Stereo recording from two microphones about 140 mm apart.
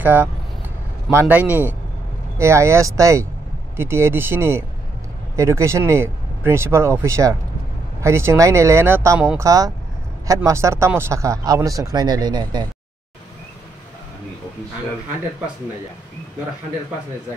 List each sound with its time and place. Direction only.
0.0 s speech: 15° right (ahead or behind); by 12.6 s 30° right (ahead or behind)